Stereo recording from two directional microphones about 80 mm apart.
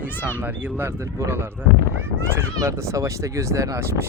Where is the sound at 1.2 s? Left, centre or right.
Right.